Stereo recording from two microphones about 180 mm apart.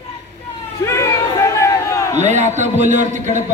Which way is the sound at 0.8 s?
15° left (ahead or behind).